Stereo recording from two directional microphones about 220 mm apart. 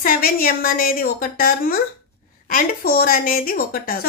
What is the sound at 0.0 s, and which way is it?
A woman's voice, 40° left (ahead or behind).